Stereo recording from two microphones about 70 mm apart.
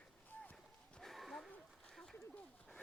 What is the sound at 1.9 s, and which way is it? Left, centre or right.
Duck, centre.